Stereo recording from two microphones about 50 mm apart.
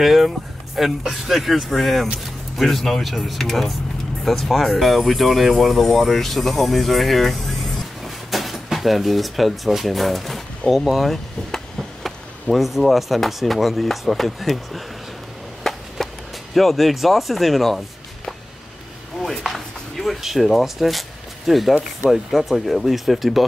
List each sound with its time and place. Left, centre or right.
0.0 s speech: centre
15.7 s chop: centre
16.5 s speech: centre
19.4 s speech: centre